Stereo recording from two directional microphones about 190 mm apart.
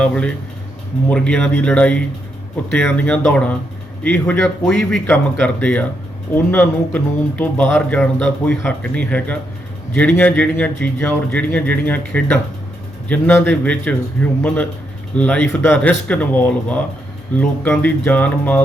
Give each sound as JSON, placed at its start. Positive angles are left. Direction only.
{"t": 0.0, "sound": "a man's voice", "side_deg": 5}